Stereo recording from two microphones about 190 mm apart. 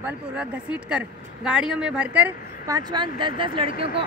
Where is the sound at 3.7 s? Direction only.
50° left (ahead or behind).